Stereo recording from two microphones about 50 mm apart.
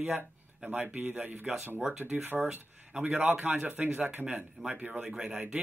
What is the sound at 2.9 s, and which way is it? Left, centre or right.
Speech, right.